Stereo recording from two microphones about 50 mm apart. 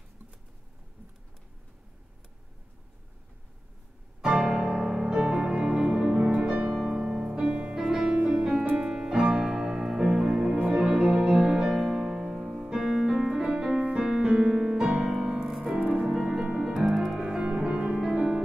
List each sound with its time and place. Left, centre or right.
4.5 s music: centre
5.0 s music: centre
5.4 s music: right
6.7 s music: centre
14.8 s music: right
15.4 s music: centre
15.7 s music: centre